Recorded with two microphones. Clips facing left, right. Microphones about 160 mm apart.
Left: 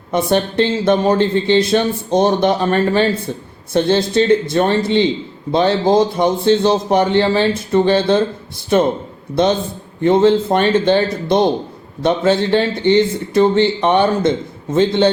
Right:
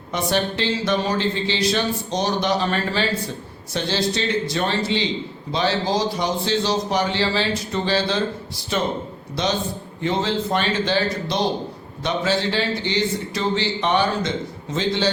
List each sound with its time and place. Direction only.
0.1 s a man's voice: 55° left (ahead or behind)